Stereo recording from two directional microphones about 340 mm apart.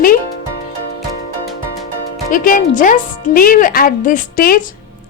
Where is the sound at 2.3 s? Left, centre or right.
Left.